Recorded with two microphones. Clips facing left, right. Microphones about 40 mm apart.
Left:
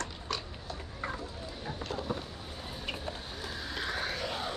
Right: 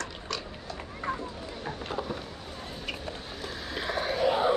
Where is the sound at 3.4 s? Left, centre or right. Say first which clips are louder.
Right 3 dB; centre.